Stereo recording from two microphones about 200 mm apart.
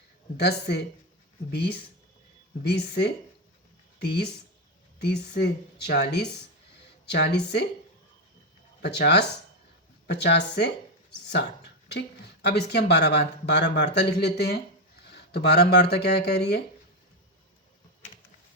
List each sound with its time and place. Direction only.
0.3 s speech: 55° left (ahead or behind)
8.8 s speech: 55° left (ahead or behind)